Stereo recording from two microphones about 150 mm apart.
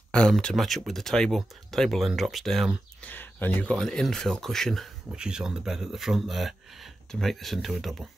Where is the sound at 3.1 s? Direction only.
10° left (ahead or behind).